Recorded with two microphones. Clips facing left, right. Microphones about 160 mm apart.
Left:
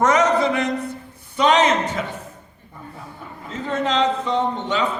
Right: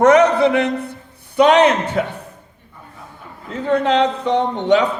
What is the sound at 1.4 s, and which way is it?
Speech, 60° right (ahead or behind).